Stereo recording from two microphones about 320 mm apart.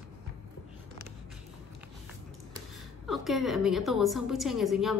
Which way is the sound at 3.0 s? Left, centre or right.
Centre.